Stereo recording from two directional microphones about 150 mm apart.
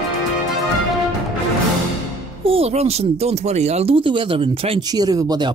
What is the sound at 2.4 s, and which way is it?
Speech, 40° right (ahead or behind).